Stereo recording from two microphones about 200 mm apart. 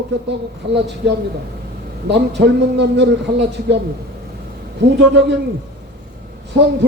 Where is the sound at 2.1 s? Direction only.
60° right (ahead or behind).